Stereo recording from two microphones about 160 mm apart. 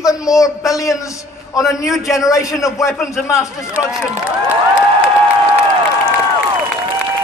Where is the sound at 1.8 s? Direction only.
Centre (ahead or behind).